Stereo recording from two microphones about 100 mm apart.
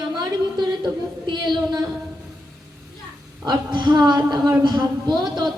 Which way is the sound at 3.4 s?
50° right (ahead or behind).